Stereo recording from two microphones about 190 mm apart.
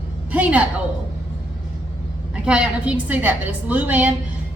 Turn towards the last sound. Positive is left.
turn(degrees=-10)  # may be behind; listen again after turning